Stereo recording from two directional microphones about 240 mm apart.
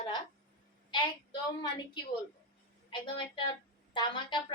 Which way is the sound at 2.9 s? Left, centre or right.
Left.